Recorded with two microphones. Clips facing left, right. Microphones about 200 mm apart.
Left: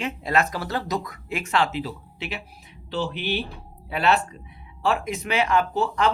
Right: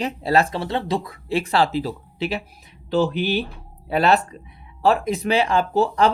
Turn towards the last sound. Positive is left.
turn(degrees=-35)  # may be behind; listen again after turning